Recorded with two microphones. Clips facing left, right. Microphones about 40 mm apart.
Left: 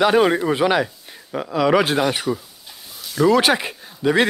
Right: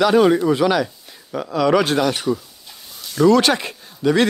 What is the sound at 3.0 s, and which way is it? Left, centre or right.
Speech, centre.